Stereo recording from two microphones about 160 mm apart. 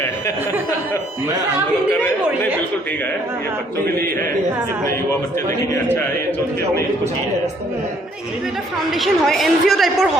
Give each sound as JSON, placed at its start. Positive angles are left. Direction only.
{"t": 9.0, "sound": "a woman's voice", "side_deg": 0}